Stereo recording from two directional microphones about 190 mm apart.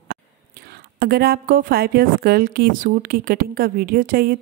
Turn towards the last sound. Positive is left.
turn(degrees=-50)  # may be behind; listen again after turning